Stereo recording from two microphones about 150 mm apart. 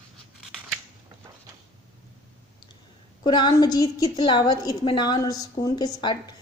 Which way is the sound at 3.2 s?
30° left (ahead or behind).